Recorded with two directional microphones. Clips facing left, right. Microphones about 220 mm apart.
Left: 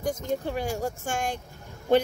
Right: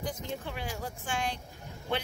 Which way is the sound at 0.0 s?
45° left (ahead or behind).